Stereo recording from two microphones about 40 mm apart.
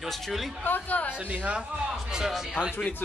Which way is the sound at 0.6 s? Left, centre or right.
Left.